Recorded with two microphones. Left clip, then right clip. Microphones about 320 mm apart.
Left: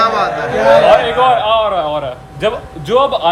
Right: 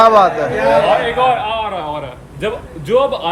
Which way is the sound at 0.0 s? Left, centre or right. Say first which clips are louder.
Right 4 dB; centre.